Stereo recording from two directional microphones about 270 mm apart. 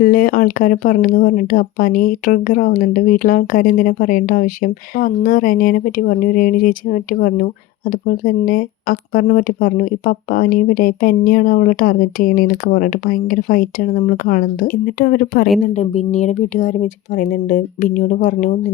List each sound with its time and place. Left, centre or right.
0.0 s speech: left
15.7 s speech: left